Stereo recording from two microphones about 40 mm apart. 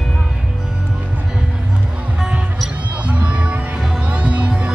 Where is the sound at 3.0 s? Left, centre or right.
Right.